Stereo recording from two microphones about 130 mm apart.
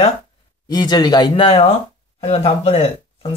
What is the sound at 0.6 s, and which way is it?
Speech, 30° left (ahead or behind).